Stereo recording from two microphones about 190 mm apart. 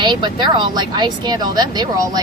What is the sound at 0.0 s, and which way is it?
Speech, 25° right (ahead or behind).